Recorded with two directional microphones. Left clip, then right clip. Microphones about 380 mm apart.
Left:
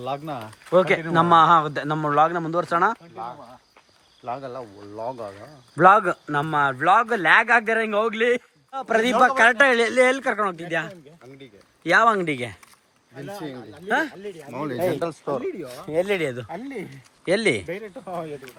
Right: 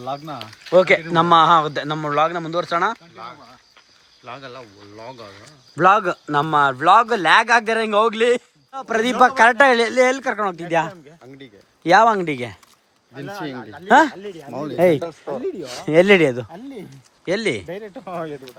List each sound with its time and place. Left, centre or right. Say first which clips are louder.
0.0 s speech: right 1 dB; centre
4.3 s speech: left 4 dB; centre
5.7 s a man's voice: even; centre
17.7 s speech: right 1 dB; right